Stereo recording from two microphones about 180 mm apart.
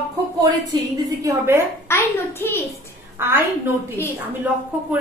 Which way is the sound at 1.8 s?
15° left (ahead or behind).